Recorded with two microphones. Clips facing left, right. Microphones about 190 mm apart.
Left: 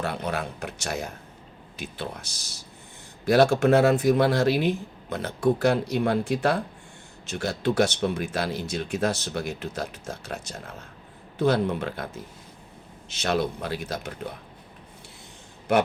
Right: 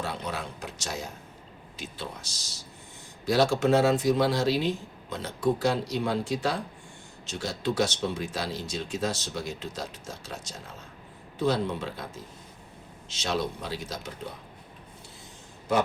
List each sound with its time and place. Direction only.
0.0 s speech: 60° left (ahead or behind)